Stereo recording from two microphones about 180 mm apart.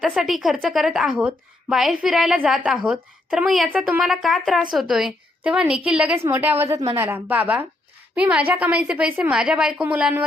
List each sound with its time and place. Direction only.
0.0 s a woman's voice: centre (ahead or behind)